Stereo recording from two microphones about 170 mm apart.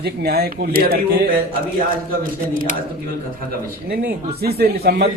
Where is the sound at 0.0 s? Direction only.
65° right (ahead or behind).